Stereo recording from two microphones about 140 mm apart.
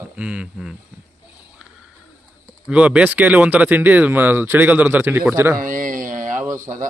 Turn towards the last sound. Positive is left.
turn(degrees=-20)  # may be behind; listen again after turning